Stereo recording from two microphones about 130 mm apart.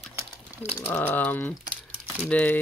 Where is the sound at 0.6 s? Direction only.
20° left (ahead or behind).